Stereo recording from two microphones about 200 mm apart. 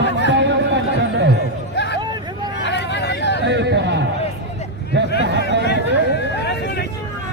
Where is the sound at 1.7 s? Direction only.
60° left (ahead or behind).